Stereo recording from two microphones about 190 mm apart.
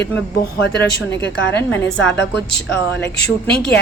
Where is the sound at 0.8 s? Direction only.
10° left (ahead or behind).